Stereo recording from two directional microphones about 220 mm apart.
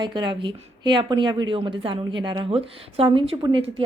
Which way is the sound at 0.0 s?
20° right (ahead or behind).